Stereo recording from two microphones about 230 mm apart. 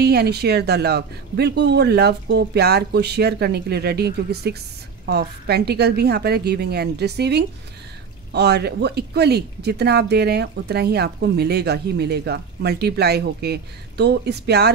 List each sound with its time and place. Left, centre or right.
0.0 s speech: right